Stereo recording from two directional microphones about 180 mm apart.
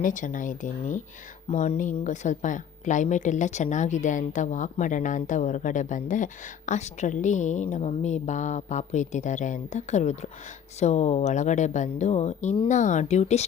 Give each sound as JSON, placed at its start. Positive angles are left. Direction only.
{"t": 0.0, "sound": "speech", "side_deg": 45}